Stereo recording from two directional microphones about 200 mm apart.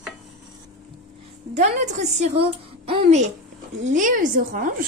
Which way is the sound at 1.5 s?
35° right (ahead or behind).